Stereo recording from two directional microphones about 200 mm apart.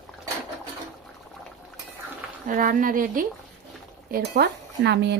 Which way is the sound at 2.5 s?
40° right (ahead or behind).